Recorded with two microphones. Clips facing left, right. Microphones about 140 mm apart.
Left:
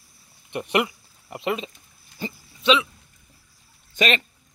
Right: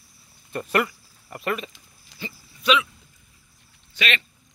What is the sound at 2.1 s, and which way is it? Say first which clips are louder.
Dog: left 5 dB; 90° right.